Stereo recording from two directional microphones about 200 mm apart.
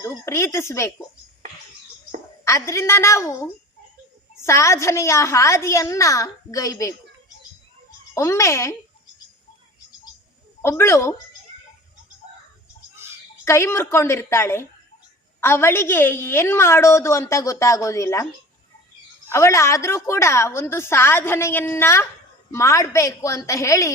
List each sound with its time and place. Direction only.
0.0 s a woman's voice: 15° left (ahead or behind)
2.4 s a woman's voice: 15° left (ahead or behind)
8.1 s a woman's voice: 15° left (ahead or behind)
10.6 s a woman's voice: 10° left (ahead or behind)
13.4 s a woman's voice: 15° left (ahead or behind)
19.3 s a woman's voice: 15° left (ahead or behind)